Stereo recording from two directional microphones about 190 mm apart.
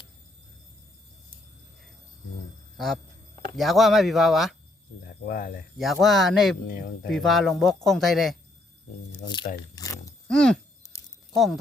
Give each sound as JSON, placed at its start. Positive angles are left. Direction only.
{"t": 2.7, "sound": "a sound", "side_deg": 0}
{"t": 3.6, "sound": "speech", "side_deg": 0}
{"t": 5.2, "sound": "speech", "side_deg": 50}
{"t": 5.7, "sound": "speech", "side_deg": 0}
{"t": 9.7, "sound": "groan", "side_deg": 15}
{"t": 10.2, "sound": "speech", "side_deg": 5}